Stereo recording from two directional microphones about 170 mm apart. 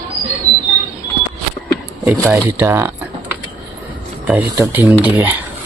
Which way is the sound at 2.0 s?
10° right (ahead or behind).